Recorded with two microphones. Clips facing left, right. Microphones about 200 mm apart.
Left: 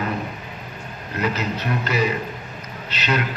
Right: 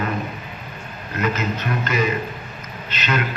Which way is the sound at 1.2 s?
35° left (ahead or behind).